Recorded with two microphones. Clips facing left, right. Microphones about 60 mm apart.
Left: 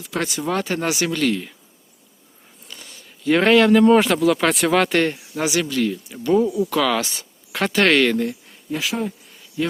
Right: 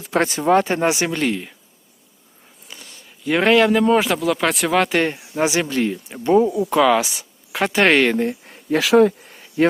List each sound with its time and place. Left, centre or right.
0.0 s speech: right; by 1.5 s centre
2.7 s speech: centre
5.1 s speech: right; by 7.7 s centre
7.7 s speech: right
8.4 s a sound: right
8.8 s speech: right
9.2 s a sound: right